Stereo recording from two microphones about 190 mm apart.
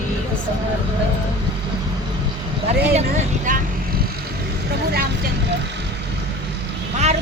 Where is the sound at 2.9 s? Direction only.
40° right (ahead or behind).